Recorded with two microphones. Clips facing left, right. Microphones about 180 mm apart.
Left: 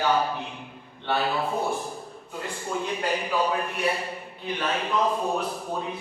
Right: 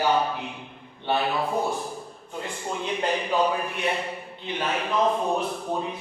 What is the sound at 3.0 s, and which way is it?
Speech, 20° right (ahead or behind).